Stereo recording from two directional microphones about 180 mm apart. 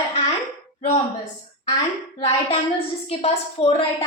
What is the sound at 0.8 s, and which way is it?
Speech, 40° left (ahead or behind).